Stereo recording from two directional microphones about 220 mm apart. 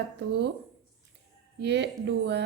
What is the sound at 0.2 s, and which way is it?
Speech, 50° right (ahead or behind).